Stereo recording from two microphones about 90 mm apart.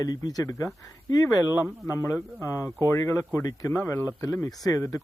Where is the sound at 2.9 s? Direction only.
35° left (ahead or behind).